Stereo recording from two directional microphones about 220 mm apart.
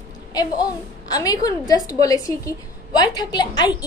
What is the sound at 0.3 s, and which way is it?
A woman's voice, 15° left (ahead or behind).